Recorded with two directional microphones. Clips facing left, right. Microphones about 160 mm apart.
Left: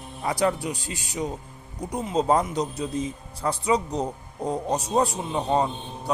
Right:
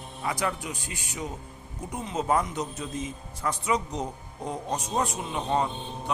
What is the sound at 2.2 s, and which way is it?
Speech, 30° left (ahead or behind).